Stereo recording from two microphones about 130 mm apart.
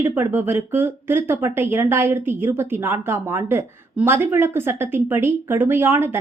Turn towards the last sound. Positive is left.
turn(degrees=-15)  # may be behind; listen again after turning